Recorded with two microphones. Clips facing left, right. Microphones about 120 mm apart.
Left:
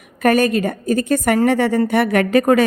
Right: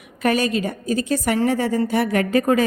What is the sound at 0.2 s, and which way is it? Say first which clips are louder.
A woman's voice: left 5 dB; 50° left (ahead or behind).